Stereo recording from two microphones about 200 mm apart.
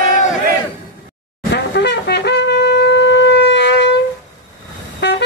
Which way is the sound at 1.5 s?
60° left (ahead or behind).